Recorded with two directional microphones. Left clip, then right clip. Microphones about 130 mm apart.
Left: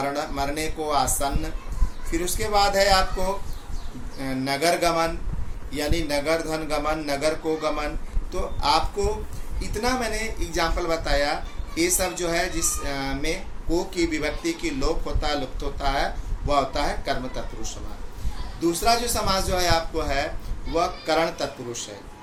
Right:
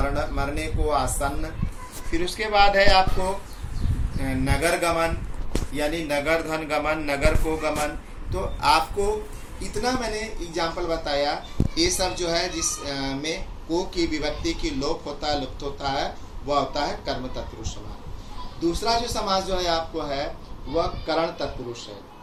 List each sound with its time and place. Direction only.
0.1 s speech: 25° left (ahead or behind)
4.2 s speech: 20° left (ahead or behind)
8.3 s speech: 20° left (ahead or behind)